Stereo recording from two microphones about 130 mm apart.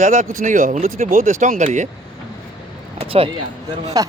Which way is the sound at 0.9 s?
90° right.